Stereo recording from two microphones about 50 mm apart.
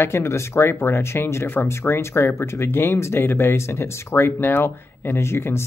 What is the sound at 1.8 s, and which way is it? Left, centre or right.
Speech, left.